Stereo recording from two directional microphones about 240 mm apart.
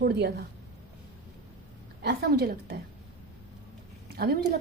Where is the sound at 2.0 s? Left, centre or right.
Right.